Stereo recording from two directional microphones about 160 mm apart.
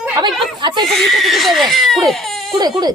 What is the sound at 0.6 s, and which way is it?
Speech, 30° right (ahead or behind).